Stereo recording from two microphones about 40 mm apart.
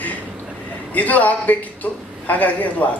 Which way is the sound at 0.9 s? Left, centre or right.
Left.